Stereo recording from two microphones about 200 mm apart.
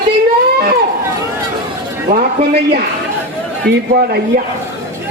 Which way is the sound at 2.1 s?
50° right (ahead or behind).